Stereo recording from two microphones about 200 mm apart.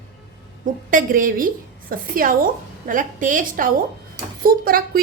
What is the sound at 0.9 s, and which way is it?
A woman's voice, 40° right (ahead or behind).